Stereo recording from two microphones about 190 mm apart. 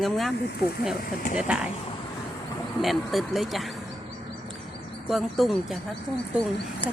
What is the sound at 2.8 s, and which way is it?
Speech, centre (ahead or behind).